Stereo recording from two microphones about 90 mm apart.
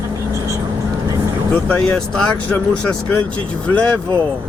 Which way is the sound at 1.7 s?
15° left (ahead or behind).